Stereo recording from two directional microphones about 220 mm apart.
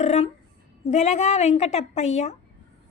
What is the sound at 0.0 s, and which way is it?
A woman's voice, 30° left (ahead or behind).